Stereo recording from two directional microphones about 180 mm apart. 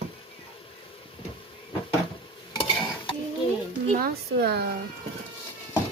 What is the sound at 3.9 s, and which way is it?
Speech, 60° right (ahead or behind).